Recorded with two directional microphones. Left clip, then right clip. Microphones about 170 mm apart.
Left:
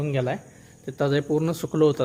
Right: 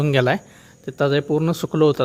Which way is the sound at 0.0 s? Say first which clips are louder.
Right 8 dB; 40° right (ahead or behind).